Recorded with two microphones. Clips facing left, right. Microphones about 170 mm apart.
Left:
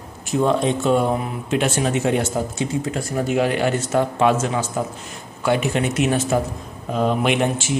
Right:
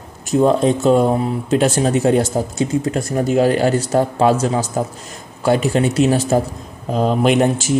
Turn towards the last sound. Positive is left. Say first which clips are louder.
# right 5 dB
turn(degrees=-40)  # may be behind; listen again after turning